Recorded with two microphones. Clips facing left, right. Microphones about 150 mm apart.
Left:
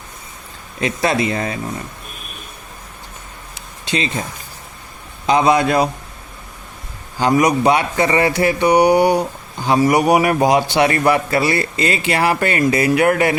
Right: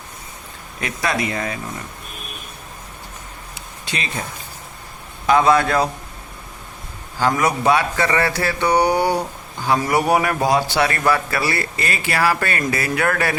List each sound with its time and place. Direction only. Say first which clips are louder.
0.8 s a man's voice: left 5 dB; 25° left (ahead or behind)
3.8 s speech: left 7 dB; 25° left (ahead or behind)
5.2 s speech: left 1 dB; 20° left (ahead or behind)
7.2 s a man's voice: left 4 dB; 20° left (ahead or behind)